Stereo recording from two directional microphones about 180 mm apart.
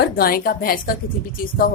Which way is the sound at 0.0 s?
55° left (ahead or behind).